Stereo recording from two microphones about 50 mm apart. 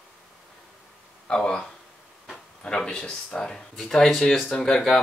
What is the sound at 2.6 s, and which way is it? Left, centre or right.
Speech, centre.